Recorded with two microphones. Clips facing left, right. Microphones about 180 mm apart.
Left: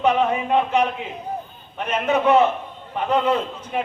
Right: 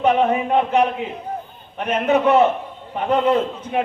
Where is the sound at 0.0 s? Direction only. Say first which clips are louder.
Right 2 dB; 50° right (ahead or behind).